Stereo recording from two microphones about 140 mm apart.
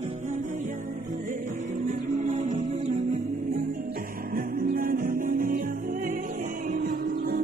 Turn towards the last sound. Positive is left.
turn(degrees=-90)